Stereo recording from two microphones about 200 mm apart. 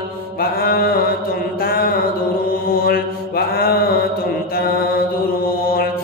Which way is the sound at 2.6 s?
45° left (ahead or behind).